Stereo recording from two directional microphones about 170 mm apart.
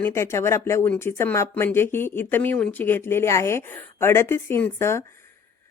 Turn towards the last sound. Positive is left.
turn(degrees=15)  # may be behind; listen again after turning